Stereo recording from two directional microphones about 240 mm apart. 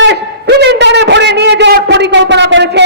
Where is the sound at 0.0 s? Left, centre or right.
Right.